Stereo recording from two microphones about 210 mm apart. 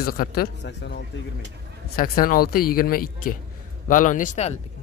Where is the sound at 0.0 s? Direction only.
45° left (ahead or behind).